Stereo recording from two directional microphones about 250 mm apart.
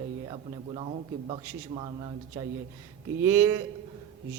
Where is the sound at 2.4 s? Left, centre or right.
Centre.